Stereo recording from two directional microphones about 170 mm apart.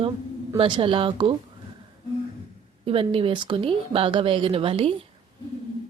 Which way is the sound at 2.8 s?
30° right (ahead or behind).